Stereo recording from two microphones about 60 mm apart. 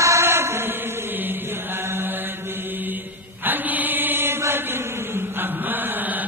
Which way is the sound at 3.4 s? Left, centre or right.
Right.